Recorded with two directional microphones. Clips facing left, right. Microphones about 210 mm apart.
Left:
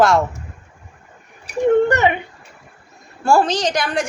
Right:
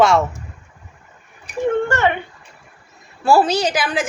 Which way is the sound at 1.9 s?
15° left (ahead or behind).